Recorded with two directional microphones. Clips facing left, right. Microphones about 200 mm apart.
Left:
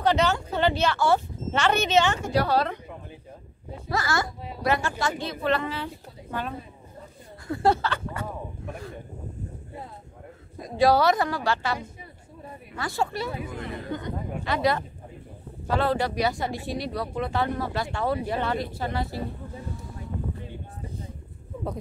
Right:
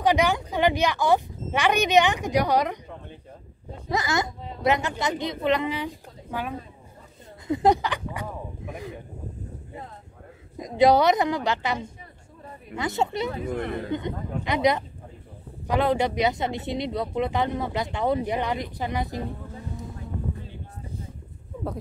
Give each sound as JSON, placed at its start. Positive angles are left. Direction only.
{"t": 0.0, "sound": "speech", "side_deg": -15}
{"t": 3.9, "sound": "speech", "side_deg": -20}
{"t": 10.6, "sound": "speech", "side_deg": -20}
{"t": 13.5, "sound": "speech", "side_deg": -55}
{"t": 13.9, "sound": "speech", "side_deg": -20}